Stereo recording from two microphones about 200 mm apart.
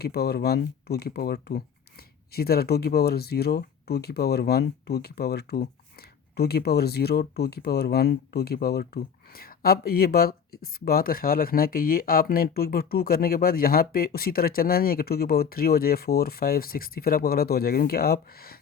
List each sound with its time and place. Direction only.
0.0 s speech: 50° left (ahead or behind)